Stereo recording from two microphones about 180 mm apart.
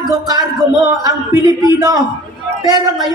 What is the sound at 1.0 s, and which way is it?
Speech, 20° right (ahead or behind).